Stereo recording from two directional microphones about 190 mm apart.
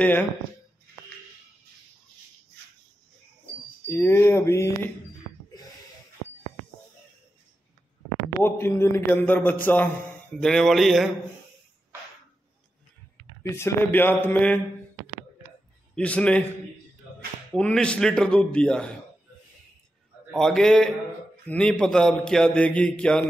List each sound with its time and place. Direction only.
0.0 s a man's voice: 10° left (ahead or behind)
3.9 s a man's voice: 10° left (ahead or behind)
8.4 s a man's voice: 10° left (ahead or behind)
13.4 s a man's voice: 15° left (ahead or behind)
15.9 s a man's voice: 5° left (ahead or behind)
17.6 s a man's voice: 5° left (ahead or behind)
20.2 s a man's voice: 5° left (ahead or behind)